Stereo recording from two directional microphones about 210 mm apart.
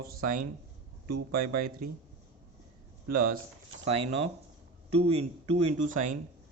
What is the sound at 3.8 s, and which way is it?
Speech, 30° right (ahead or behind).